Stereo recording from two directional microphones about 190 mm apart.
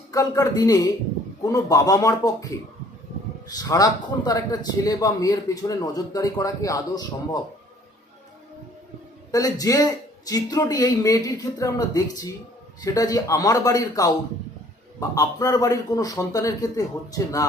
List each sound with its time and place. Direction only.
0.1 s a man's voice: 20° left (ahead or behind)
3.5 s a man's voice: 20° left (ahead or behind)
9.3 s a man's voice: 20° left (ahead or behind)
15.1 s a man's voice: 20° left (ahead or behind)